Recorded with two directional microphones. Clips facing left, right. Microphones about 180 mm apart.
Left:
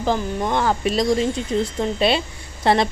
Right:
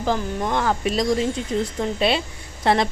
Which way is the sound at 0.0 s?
25° left (ahead or behind).